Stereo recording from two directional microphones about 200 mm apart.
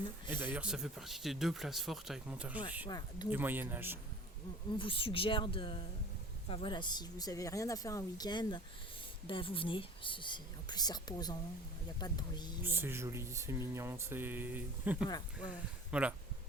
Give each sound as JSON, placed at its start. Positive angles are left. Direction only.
{"t": 0.3, "sound": "speech", "side_deg": -10}
{"t": 2.8, "sound": "speech", "side_deg": 20}
{"t": 3.2, "sound": "speech", "side_deg": -10}
{"t": 4.8, "sound": "speech", "side_deg": 25}
{"t": 12.6, "sound": "speech", "side_deg": -10}
{"t": 15.0, "sound": "speech", "side_deg": 20}
{"t": 15.9, "sound": "speech", "side_deg": -5}